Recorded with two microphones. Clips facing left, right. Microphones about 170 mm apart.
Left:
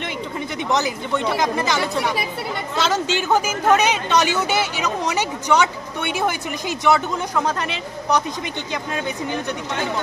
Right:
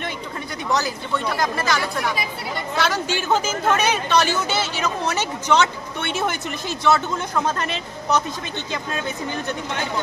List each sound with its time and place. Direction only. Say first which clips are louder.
0.7 s speech: left 1 dB; 20° left (ahead or behind)